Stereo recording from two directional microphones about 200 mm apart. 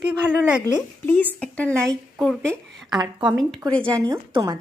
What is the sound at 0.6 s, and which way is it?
A woman's voice, 10° left (ahead or behind).